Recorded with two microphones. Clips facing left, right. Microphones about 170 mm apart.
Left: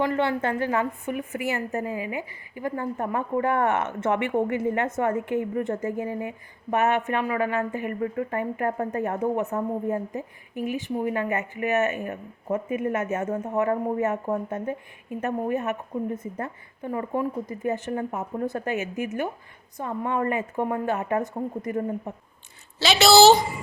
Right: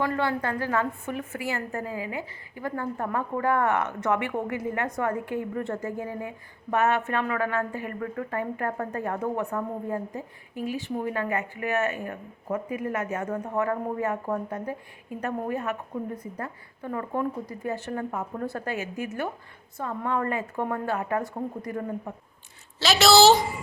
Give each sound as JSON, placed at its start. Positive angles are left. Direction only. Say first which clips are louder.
{"t": 0.0, "sound": "a woman's voice", "louder": "left 3 dB", "side_deg": 25}
{"t": 22.8, "sound": "a woman's voice", "louder": "left 2 dB", "side_deg": 0}